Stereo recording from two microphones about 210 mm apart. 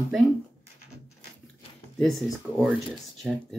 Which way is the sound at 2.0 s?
Centre (ahead or behind).